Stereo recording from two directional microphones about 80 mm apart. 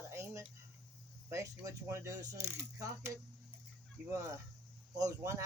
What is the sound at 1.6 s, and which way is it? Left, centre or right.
Speech, right.